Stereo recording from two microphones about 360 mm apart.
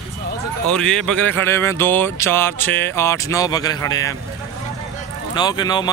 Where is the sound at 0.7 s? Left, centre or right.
Centre.